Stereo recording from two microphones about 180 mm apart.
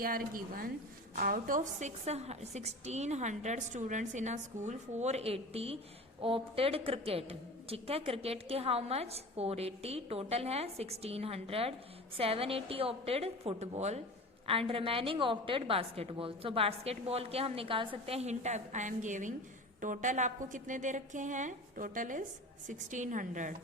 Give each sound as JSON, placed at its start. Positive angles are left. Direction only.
{"t": 0.0, "sound": "a woman's voice", "side_deg": -55}